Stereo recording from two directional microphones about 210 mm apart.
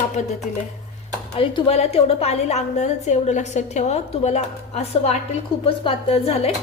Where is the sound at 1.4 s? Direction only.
25° left (ahead or behind).